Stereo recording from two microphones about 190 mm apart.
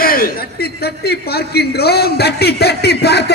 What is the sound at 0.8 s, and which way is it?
A man's voice, 55° left (ahead or behind).